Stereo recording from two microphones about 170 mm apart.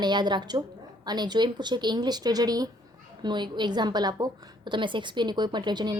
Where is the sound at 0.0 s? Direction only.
25° right (ahead or behind).